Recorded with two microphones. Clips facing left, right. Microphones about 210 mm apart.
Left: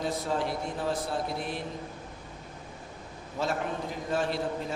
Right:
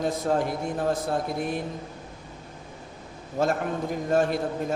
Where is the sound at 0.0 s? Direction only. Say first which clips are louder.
Right 5 dB; 50° right (ahead or behind).